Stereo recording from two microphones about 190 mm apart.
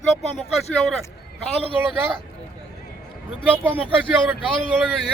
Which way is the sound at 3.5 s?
10° right (ahead or behind).